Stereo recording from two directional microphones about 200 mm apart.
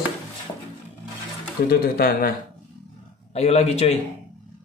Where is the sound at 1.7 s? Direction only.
50° left (ahead or behind).